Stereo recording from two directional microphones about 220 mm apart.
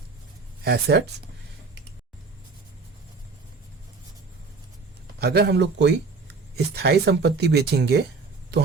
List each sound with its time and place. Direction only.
0.6 s speech: 45° right (ahead or behind)
5.2 s speech: 45° right (ahead or behind)